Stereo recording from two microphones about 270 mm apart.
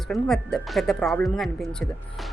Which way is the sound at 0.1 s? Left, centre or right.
Centre.